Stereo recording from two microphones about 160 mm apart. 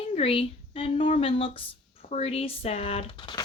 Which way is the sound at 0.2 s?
35° left (ahead or behind).